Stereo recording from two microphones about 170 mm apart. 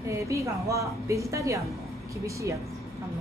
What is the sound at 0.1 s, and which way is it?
A woman's voice, 20° right (ahead or behind).